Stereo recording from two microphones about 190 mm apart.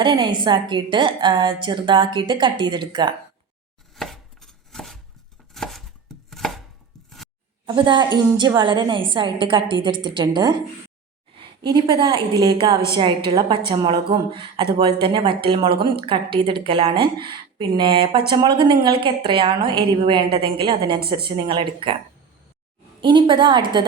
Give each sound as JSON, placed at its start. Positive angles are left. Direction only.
{"t": 0.0, "sound": "a woman's voice", "side_deg": -25}
{"t": 3.9, "sound": "chopping", "side_deg": 0}
{"t": 7.8, "sound": "a woman's voice", "side_deg": -25}
{"t": 23.0, "sound": "a woman's voice", "side_deg": -25}